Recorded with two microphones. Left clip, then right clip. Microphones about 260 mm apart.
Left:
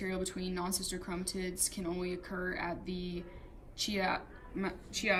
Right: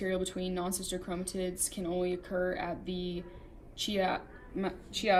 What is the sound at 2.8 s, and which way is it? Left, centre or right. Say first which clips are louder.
Speech: right 4 dB; left.